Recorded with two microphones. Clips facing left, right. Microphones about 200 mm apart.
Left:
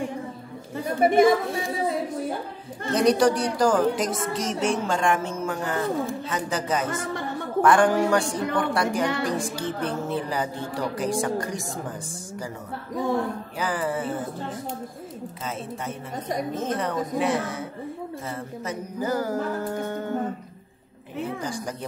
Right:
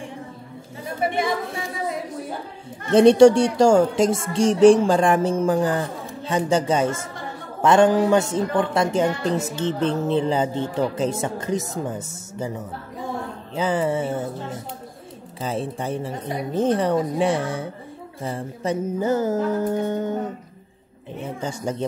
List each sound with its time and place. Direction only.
2.9 s speech: 30° right (ahead or behind)
13.6 s speech: 25° right (ahead or behind)
15.4 s a woman's voice: 30° right (ahead or behind)
21.4 s speech: 25° right (ahead or behind)